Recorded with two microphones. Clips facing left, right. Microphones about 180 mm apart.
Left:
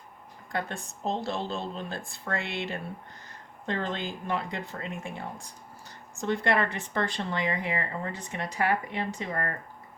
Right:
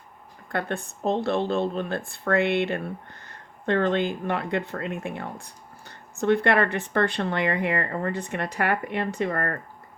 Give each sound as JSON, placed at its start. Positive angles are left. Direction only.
{"t": 0.4, "sound": "speech", "side_deg": -60}